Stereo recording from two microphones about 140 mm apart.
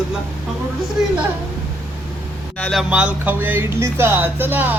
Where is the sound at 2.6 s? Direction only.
5° left (ahead or behind).